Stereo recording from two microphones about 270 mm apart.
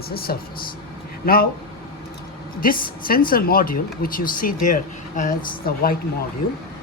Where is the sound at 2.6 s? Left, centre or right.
Left.